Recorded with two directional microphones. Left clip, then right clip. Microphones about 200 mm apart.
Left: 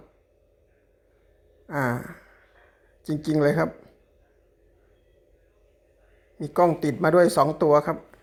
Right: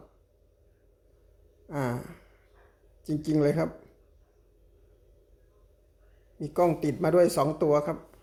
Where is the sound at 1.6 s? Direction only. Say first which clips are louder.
Left 6 dB; 5° left (ahead or behind).